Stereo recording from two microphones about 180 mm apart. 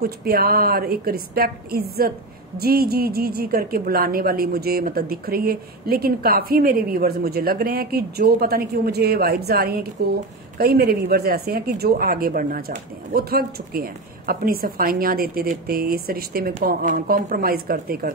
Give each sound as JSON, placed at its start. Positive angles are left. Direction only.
{"t": 0.0, "sound": "a woman's voice", "side_deg": -55}